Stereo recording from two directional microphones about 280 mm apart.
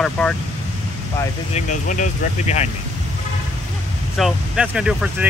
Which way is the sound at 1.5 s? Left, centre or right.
Left.